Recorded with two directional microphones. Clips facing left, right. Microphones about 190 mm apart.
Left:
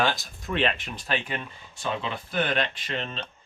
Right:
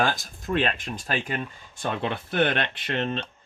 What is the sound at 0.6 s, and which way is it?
Speech, 45° right (ahead or behind).